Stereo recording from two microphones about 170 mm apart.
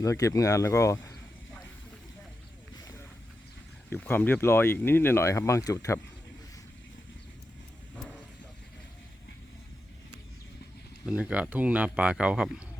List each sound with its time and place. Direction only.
0.0 s speech: 20° left (ahead or behind)
3.8 s speech: 10° left (ahead or behind)
11.0 s speech: 5° right (ahead or behind)